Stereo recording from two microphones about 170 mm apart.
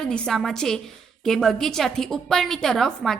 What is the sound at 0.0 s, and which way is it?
A woman's voice, 5° left (ahead or behind).